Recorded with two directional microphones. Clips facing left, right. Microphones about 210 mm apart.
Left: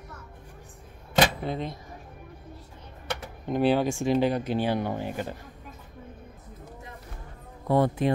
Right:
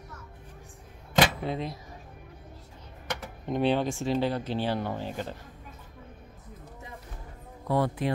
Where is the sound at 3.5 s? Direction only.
5° left (ahead or behind).